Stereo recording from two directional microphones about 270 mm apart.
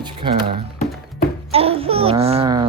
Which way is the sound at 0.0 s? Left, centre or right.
Centre.